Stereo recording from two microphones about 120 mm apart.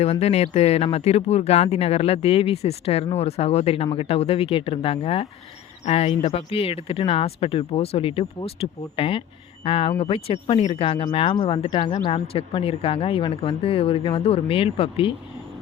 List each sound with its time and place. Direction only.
0.0 s speech: 60° left (ahead or behind); by 11.4 s 40° left (ahead or behind)
11.4 s speech: 50° left (ahead or behind)